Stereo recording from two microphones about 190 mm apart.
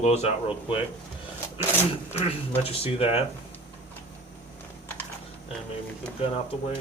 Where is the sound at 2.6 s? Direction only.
30° left (ahead or behind).